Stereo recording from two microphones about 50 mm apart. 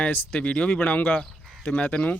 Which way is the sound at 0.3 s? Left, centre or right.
Left.